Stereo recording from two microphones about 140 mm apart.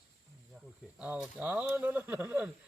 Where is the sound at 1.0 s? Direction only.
5° right (ahead or behind).